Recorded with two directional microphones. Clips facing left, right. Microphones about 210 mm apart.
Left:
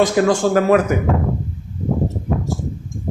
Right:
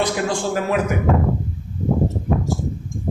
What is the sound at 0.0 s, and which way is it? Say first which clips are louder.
Speech: left 6 dB; 45° left (ahead or behind).